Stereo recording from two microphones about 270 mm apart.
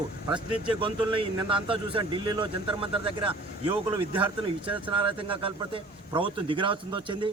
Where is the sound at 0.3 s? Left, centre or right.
Centre.